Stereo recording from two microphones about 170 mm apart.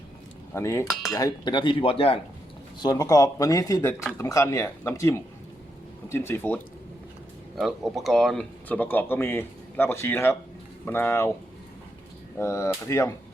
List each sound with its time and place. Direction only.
0.5 s speech: 15° left (ahead or behind); by 2.2 s 35° left (ahead or behind)
2.8 s speech: 20° left (ahead or behind)
7.5 s speech: centre (ahead or behind); by 11.3 s 15° left (ahead or behind)
12.4 s speech: 15° left (ahead or behind)